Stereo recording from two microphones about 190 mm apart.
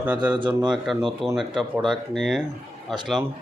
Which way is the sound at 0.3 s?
25° right (ahead or behind).